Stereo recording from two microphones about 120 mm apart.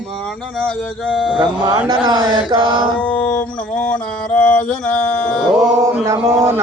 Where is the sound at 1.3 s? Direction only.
35° right (ahead or behind).